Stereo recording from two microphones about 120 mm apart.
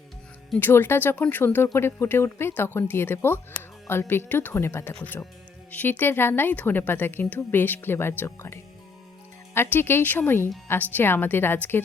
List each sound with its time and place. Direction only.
0.6 s speech: 20° left (ahead or behind)
9.6 s speech: 20° left (ahead or behind)